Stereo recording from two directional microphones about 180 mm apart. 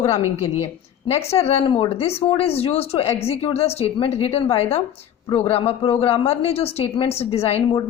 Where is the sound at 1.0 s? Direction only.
35° left (ahead or behind).